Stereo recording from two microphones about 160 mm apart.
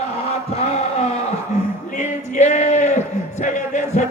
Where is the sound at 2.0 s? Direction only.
45° left (ahead or behind).